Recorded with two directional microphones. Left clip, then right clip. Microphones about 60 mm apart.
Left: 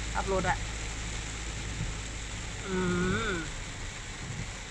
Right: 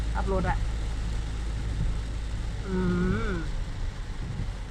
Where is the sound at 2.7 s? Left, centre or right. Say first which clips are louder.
Even; centre.